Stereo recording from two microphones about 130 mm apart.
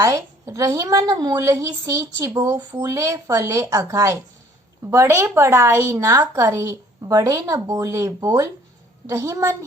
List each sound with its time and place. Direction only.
0.0 s a woman's voice: 25° right (ahead or behind)